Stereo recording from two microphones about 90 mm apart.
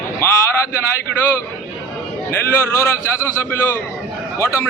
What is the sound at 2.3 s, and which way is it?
A man's voice, 25° left (ahead or behind).